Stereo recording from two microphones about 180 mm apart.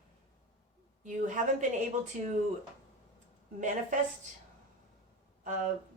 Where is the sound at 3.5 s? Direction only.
45° right (ahead or behind).